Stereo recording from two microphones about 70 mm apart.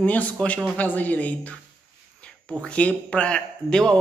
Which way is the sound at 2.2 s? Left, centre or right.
Centre.